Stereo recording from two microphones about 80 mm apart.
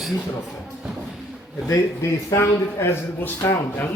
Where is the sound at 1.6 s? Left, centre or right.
Left.